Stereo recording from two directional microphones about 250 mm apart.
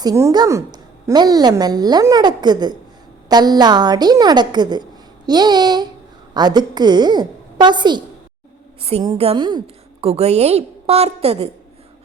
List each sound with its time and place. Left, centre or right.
0.0 s a woman's voice: centre